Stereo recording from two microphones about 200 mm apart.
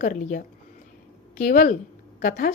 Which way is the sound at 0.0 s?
45° left (ahead or behind).